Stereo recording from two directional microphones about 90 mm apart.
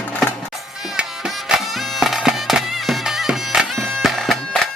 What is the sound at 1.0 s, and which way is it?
Music, 10° right (ahead or behind).